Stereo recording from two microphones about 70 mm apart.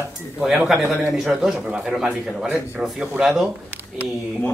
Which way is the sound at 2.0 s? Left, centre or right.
Centre.